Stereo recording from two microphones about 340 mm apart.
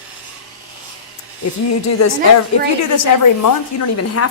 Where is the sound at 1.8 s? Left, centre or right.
Left.